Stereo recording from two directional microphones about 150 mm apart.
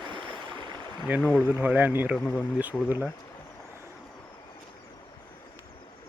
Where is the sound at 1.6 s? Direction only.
10° right (ahead or behind).